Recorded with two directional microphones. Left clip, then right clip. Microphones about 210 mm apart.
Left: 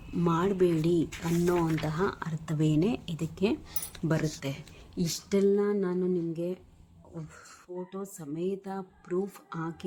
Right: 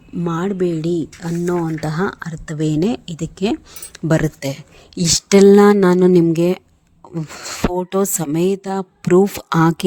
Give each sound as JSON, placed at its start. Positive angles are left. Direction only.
{"t": 0.3, "sound": "speech", "side_deg": -25}
{"t": 1.5, "sound": "speech", "side_deg": -10}
{"t": 1.8, "sound": "speech", "side_deg": -30}